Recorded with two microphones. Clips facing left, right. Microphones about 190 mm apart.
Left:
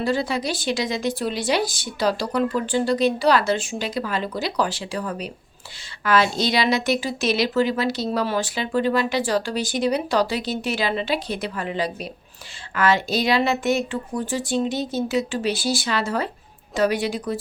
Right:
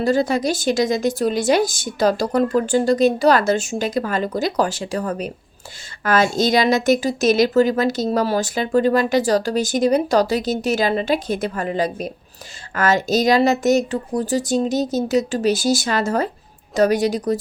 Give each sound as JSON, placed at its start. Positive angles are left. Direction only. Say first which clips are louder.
{"t": 0.0, "sound": "a woman's voice", "louder": "right 5 dB", "side_deg": -45}